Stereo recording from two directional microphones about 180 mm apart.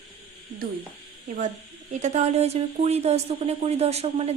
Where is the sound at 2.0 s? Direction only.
40° right (ahead or behind).